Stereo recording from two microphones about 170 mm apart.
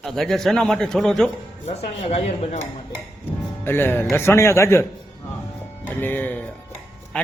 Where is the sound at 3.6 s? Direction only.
10° left (ahead or behind).